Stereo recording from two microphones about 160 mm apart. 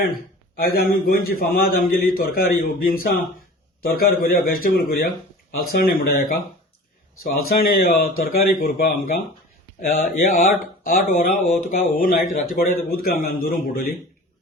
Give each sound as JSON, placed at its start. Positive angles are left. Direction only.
{"t": 0.6, "sound": "a man's voice", "side_deg": 75}